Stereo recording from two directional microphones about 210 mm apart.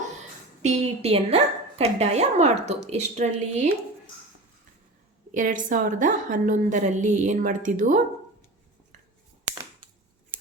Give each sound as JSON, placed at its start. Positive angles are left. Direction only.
{"t": 0.6, "sound": "a woman's voice", "side_deg": -30}
{"t": 5.3, "sound": "a woman's voice", "side_deg": -40}